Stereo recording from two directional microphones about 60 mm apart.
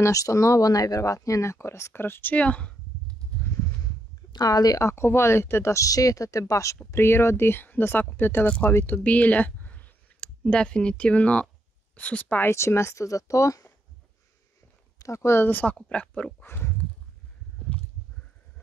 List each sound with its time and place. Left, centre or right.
0.1 s speech: left
2.3 s speech: left
4.5 s a woman's voice: left
4.8 s speech: left
6.9 s speech: left
8.6 s clicking: left
10.5 s speech: centre
12.4 s speech: left
15.0 s speech: left
15.4 s speech: left
16.4 s a sound: left